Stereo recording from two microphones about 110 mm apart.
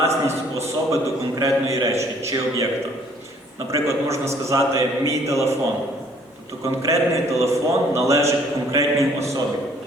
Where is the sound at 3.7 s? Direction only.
25° right (ahead or behind).